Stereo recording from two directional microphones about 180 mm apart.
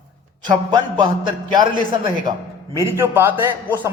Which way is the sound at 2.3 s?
25° right (ahead or behind).